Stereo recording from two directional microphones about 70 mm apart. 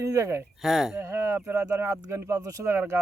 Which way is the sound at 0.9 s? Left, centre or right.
Right.